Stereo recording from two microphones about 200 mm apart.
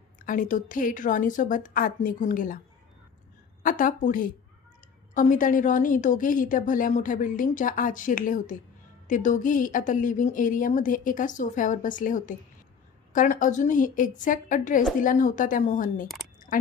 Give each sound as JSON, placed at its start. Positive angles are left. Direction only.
{"t": 0.2, "sound": "a woman's voice", "side_deg": 40}
{"t": 3.6, "sound": "a woman's voice", "side_deg": 40}